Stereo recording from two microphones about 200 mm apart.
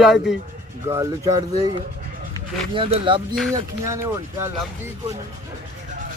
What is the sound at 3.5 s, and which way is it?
Speech, 15° right (ahead or behind).